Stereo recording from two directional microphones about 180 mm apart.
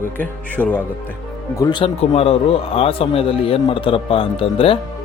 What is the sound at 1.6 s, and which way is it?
Speech, 25° left (ahead or behind).